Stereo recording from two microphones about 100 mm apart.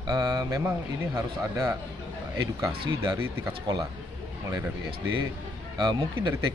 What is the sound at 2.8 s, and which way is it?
Speech, 50° right (ahead or behind).